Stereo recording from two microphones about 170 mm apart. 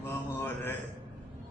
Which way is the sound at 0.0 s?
10° left (ahead or behind).